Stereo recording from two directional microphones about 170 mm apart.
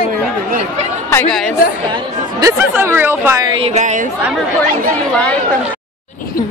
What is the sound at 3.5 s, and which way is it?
Speech, 40° right (ahead or behind).